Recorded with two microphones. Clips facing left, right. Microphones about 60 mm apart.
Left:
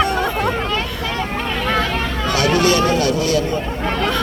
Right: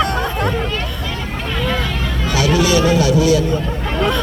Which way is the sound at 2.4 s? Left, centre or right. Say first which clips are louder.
Right 1 dB; left.